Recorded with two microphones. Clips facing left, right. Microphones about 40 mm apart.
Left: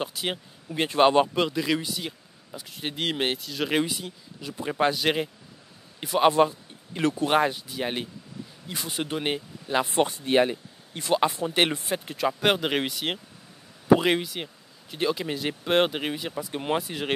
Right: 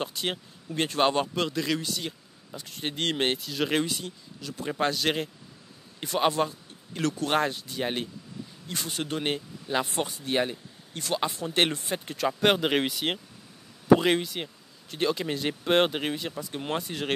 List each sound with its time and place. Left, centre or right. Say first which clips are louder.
0.0 s speech: left 1 dB; centre
4.4 s a man's voice: left 3 dB; centre
6.3 s speech: left 6 dB; centre
7.2 s speech: left 3 dB; centre
10.2 s speech: left 5 dB; left